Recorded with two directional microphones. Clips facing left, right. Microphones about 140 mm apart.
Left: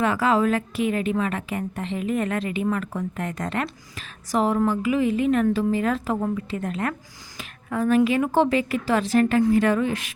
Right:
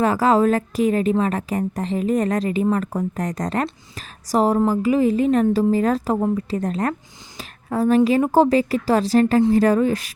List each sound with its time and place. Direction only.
0.0 s a woman's voice: 40° right (ahead or behind)